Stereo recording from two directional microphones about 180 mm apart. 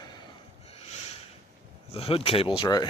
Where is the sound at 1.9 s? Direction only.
30° left (ahead or behind).